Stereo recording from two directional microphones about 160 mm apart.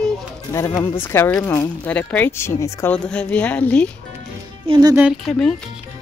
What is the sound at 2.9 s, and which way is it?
Speech, 5° left (ahead or behind).